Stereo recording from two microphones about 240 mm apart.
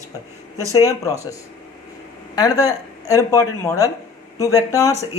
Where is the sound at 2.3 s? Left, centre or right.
Centre.